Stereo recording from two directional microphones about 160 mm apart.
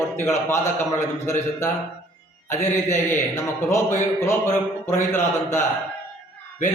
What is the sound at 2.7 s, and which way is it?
Speech, 15° left (ahead or behind).